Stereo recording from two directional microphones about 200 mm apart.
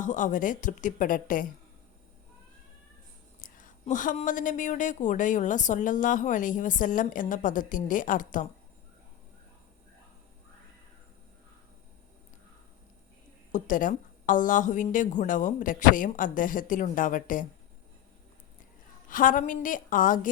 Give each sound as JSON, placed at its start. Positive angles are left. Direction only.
{"t": 0.0, "sound": "a woman's voice", "side_deg": 40}
{"t": 3.4, "sound": "a woman's voice", "side_deg": 40}
{"t": 13.5, "sound": "a woman's voice", "side_deg": 40}
{"t": 19.0, "sound": "a woman's voice", "side_deg": 40}